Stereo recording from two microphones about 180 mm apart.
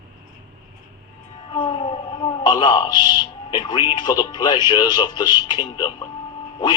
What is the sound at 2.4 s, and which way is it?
A man's voice, 25° left (ahead or behind).